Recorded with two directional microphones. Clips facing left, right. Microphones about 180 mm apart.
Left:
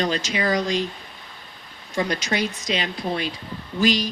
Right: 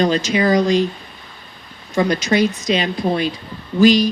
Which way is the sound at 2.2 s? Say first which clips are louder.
Right 8 dB; 45° right (ahead or behind).